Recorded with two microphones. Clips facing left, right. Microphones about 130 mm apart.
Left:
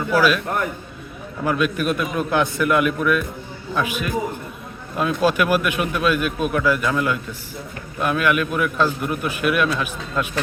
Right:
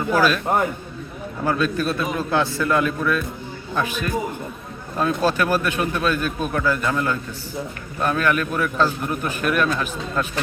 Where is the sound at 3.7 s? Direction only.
10° left (ahead or behind).